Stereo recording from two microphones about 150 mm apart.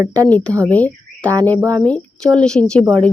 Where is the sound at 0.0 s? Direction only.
25° right (ahead or behind).